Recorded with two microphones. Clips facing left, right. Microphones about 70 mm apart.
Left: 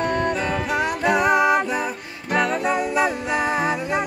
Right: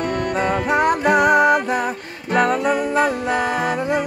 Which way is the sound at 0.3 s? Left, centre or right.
Right.